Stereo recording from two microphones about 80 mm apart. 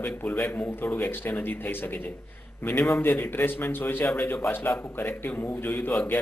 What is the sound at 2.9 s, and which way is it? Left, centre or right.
A man's voice, left.